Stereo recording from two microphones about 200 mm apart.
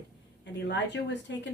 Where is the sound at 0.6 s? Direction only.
60° left (ahead or behind).